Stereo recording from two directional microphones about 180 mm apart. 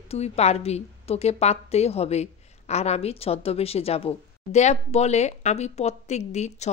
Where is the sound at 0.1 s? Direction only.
35° left (ahead or behind).